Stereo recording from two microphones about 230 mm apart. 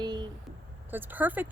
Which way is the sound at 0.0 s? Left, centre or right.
Centre.